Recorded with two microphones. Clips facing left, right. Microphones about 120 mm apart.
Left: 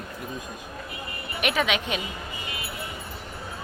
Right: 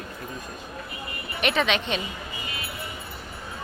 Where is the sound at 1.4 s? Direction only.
10° left (ahead or behind).